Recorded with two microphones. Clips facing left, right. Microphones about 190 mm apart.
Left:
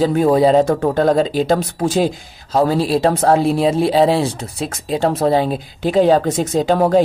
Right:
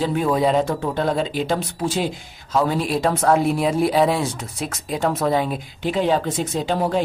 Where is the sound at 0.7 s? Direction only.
45° left (ahead or behind).